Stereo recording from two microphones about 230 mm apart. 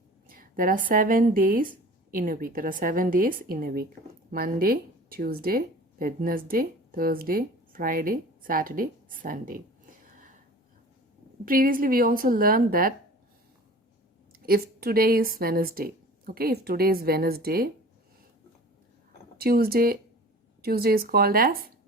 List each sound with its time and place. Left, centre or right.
0.3 s speech: right
11.4 s speech: right
14.3 s speech: right
19.4 s speech: right